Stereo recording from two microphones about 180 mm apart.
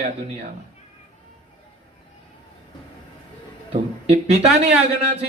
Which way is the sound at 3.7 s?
35° right (ahead or behind).